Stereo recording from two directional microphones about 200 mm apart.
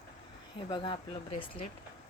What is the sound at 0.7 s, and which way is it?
Speech, 25° left (ahead or behind).